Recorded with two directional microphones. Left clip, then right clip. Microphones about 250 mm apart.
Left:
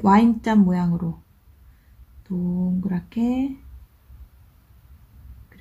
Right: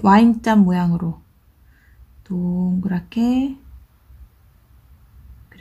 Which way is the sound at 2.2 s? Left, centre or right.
Centre.